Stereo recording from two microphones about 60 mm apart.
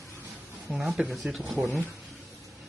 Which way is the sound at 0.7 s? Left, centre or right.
Centre.